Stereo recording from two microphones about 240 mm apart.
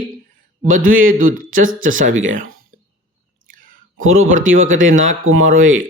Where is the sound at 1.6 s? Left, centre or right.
Right.